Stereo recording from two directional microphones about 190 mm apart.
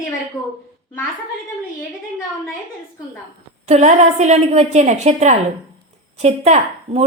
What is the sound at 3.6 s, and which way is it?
A woman's voice, 35° right (ahead or behind).